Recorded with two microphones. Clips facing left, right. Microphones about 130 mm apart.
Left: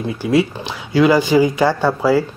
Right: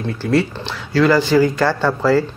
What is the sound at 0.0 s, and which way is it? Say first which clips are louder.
Speech: left 1 dB; 10° left (ahead or behind).